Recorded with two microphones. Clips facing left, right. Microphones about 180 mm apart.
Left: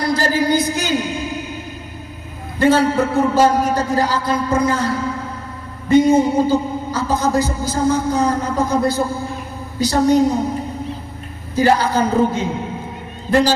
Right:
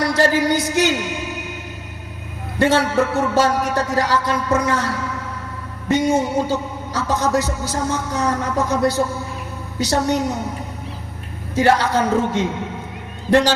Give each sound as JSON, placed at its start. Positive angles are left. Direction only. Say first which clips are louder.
{"t": 0.0, "sound": "a man's voice", "louder": "right 1 dB", "side_deg": -70}
{"t": 2.6, "sound": "a man's voice", "louder": "left 2 dB", "side_deg": -70}
{"t": 11.5, "sound": "a man's voice", "louder": "left 1 dB", "side_deg": -70}